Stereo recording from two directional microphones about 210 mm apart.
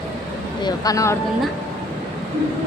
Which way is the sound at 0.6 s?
15° left (ahead or behind).